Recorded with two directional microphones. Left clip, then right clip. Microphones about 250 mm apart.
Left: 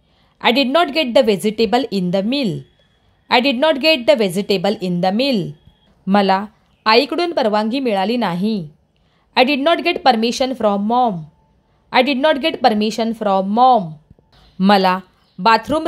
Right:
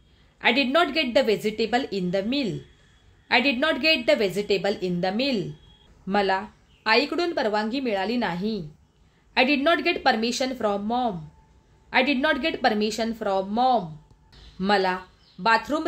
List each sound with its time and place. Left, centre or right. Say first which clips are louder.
0.4 s speech: left 6 dB; left